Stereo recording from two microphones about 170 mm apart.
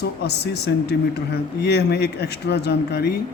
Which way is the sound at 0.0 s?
75° left (ahead or behind).